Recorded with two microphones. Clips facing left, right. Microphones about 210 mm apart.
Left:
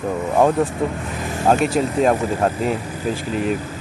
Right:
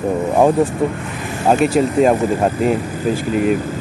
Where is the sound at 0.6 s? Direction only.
Centre (ahead or behind).